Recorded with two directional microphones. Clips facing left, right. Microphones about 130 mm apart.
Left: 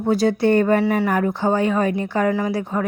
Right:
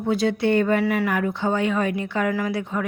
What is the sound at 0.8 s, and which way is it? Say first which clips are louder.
Speech: left 3 dB; 30° left (ahead or behind).